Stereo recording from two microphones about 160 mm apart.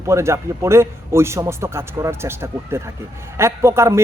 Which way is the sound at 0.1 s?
15° right (ahead or behind).